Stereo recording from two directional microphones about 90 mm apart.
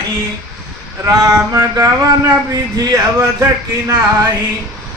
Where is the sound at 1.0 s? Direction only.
40° right (ahead or behind).